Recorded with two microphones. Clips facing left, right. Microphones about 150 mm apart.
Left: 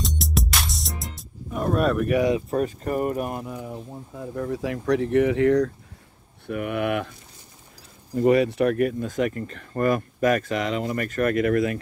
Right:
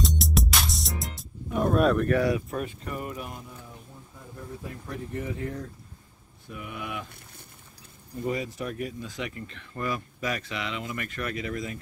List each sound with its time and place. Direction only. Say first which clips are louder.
0.0 s music: even; centre (ahead or behind)
2.0 s speech: left 3 dB; 20° left (ahead or behind)
2.5 s speech: left 9 dB; 45° left (ahead or behind); by 5.7 s 85° left
6.4 s speech: left 12 dB; 65° left (ahead or behind)
8.1 s speech: left 12 dB; 70° left (ahead or behind)